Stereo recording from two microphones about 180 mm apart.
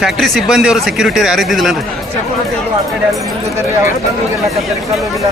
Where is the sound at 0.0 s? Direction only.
Centre (ahead or behind).